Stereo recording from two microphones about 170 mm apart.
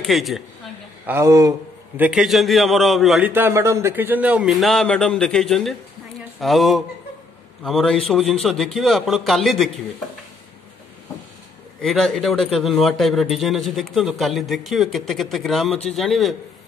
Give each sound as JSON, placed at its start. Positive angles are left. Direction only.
{"t": 0.0, "sound": "a man's voice", "side_deg": 0}
{"t": 1.0, "sound": "speech", "side_deg": -15}
{"t": 2.0, "sound": "a man's voice", "side_deg": -5}
{"t": 11.8, "sound": "a man's voice", "side_deg": 0}